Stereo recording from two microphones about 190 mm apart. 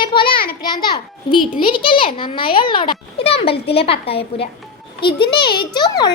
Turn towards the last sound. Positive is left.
turn(degrees=20)  # may be behind; listen again after turning